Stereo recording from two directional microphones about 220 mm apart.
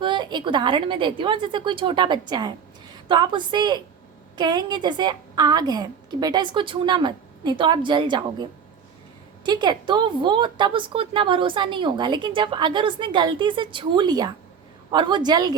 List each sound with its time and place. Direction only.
0.0 s a woman's voice: 20° right (ahead or behind)